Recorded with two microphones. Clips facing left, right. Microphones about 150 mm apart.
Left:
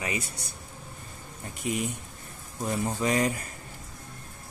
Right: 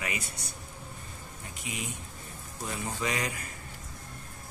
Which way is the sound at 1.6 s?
50° left (ahead or behind).